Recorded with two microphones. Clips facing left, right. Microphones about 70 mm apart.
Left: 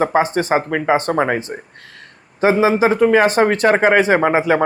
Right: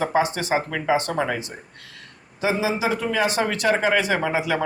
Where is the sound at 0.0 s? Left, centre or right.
Left.